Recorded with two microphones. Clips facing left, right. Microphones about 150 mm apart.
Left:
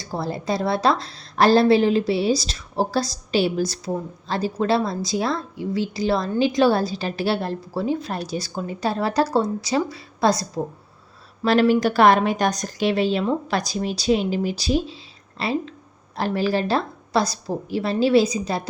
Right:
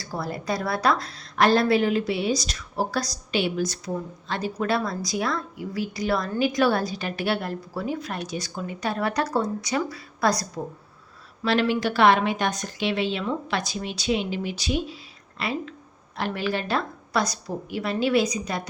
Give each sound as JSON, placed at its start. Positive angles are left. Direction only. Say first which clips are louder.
{"t": 0.0, "sound": "a woman's voice", "louder": "left 4 dB", "side_deg": 25}
{"t": 11.4, "sound": "a woman's voice", "louder": "left 5 dB", "side_deg": 40}